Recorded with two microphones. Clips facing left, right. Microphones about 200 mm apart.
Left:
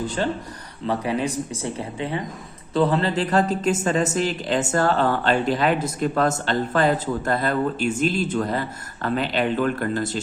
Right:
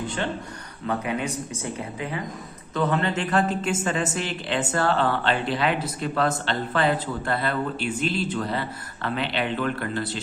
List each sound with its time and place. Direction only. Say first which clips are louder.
0.9 s a woman's voice: left 3 dB; 30° left (ahead or behind)